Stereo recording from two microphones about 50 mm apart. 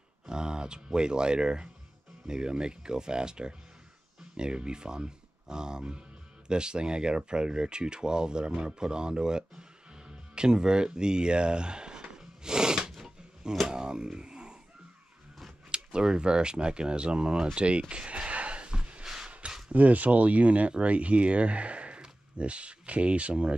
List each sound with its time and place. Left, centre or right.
0.3 s speech: centre
12.9 s a sound: centre
13.7 s speech: centre
15.7 s speech: centre
17.6 s a sound: right
19.7 s speech: right